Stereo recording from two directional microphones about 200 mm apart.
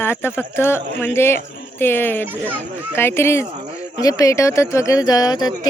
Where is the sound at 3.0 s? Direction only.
10° left (ahead or behind).